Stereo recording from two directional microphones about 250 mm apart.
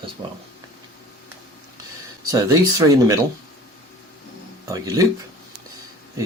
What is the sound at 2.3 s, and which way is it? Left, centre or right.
Speech, centre.